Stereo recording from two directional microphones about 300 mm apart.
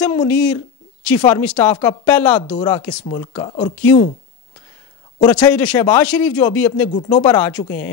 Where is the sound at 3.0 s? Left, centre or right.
Centre.